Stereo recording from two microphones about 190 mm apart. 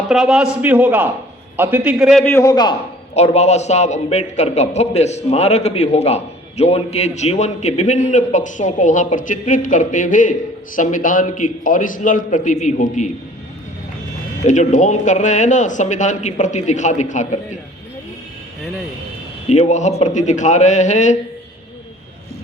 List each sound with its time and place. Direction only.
0.1 s a man's voice: centre (ahead or behind)
2.2 s a man's voice: 15° left (ahead or behind)
3.2 s a man's voice: 35° left (ahead or behind)
14.4 s a man's voice: 40° left (ahead or behind)
19.5 s a man's voice: 35° left (ahead or behind)